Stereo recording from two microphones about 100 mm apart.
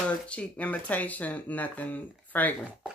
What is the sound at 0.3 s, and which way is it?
Speech, 10° left (ahead or behind).